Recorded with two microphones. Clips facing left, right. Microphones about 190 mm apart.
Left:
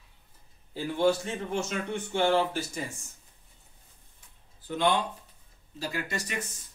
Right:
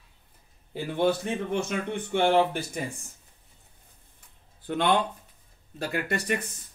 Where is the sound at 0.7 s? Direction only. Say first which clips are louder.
Even; 60° right (ahead or behind).